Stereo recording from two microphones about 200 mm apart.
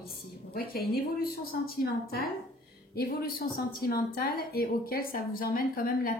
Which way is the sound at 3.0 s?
45° left (ahead or behind).